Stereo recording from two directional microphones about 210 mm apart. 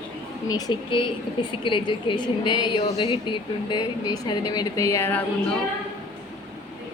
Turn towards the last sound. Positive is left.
turn(degrees=10)  # may be behind; listen again after turning